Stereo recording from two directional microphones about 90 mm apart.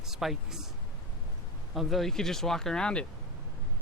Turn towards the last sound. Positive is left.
turn(degrees=10)  # may be behind; listen again after turning